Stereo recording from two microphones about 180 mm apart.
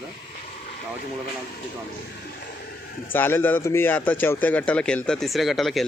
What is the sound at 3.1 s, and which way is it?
A man's voice, 10° left (ahead or behind).